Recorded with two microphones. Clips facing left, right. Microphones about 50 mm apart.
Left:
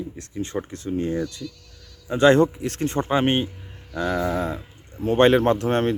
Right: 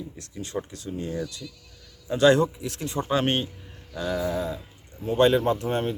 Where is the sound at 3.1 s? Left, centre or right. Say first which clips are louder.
Left 2 dB; left.